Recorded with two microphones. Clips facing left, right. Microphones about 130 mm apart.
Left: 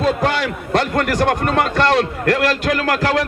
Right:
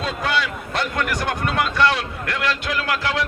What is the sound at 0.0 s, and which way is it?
A man's voice, 50° left (ahead or behind).